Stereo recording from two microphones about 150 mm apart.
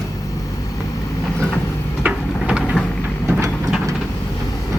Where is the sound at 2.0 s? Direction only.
5° right (ahead or behind).